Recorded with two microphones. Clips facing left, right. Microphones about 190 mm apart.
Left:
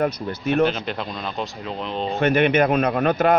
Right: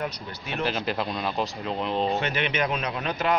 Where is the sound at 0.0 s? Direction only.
50° left (ahead or behind).